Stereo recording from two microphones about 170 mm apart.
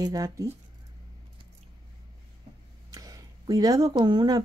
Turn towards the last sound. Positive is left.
turn(degrees=-25)  # may be behind; listen again after turning